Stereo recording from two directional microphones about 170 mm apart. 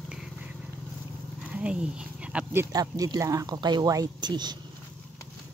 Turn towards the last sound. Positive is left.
turn(degrees=-25)  # may be behind; listen again after turning